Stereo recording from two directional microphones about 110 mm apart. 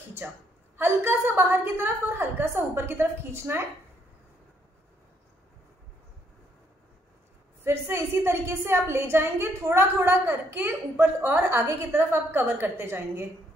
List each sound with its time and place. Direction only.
0.2 s a woman's voice: 15° right (ahead or behind)
7.6 s a woman's voice: 25° right (ahead or behind)